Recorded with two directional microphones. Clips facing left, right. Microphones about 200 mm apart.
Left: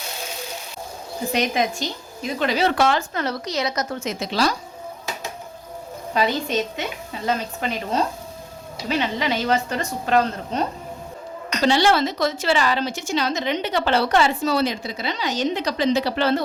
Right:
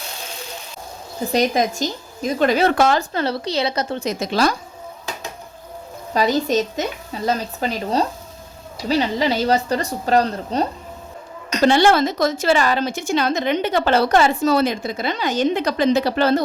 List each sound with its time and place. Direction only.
1.3 s a woman's voice: 40° right (ahead or behind)
6.1 s a woman's voice: 40° right (ahead or behind)
11.6 s a woman's voice: 50° right (ahead or behind)